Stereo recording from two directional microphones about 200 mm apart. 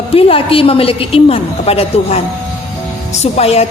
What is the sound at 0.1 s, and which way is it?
A woman's voice, 30° left (ahead or behind).